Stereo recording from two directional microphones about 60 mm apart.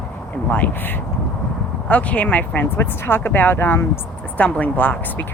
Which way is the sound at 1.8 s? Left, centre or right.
Left.